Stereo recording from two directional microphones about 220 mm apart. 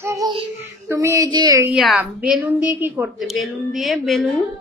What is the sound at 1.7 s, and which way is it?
A woman's voice, centre (ahead or behind).